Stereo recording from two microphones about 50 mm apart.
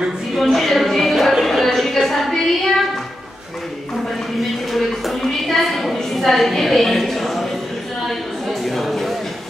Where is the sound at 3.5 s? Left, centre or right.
Centre.